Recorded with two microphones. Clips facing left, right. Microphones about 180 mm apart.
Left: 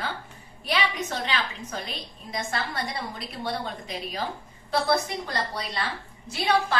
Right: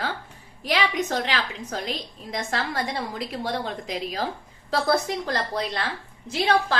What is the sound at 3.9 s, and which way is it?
Speech, 90° right.